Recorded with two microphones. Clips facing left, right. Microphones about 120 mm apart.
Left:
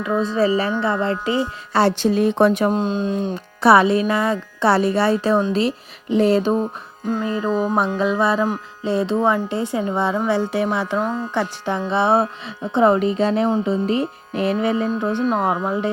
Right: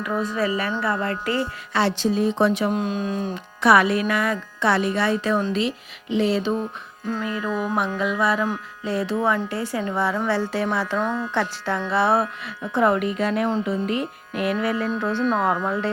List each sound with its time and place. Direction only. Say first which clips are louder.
0.0 s a woman's voice: left 5 dB; 25° left (ahead or behind)
2.0 s speech: left 4 dB; 65° left (ahead or behind)
2.7 s a woman's voice: left 4 dB; 25° left (ahead or behind); by 6.6 s 45° left (ahead or behind)
6.6 s a woman's voice: left 5 dB; 30° left (ahead or behind)